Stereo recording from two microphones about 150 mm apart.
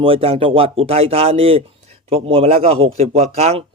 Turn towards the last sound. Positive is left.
turn(degrees=-45)  # may be behind; listen again after turning